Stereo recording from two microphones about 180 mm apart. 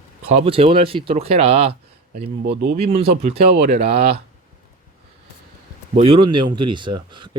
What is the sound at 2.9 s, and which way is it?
Speech, 35° right (ahead or behind).